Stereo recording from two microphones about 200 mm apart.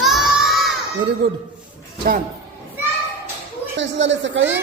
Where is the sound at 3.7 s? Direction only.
65° right (ahead or behind).